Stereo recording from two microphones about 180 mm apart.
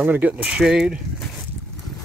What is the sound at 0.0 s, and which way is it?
Speech, 10° right (ahead or behind).